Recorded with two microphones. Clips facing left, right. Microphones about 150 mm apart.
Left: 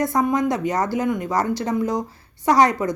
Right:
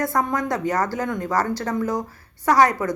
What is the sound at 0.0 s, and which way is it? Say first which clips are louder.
A woman's voice: left 3 dB; 15° left (ahead or behind).